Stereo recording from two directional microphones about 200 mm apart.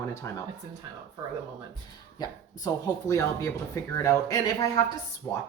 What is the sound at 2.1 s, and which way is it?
Speech, 20° left (ahead or behind).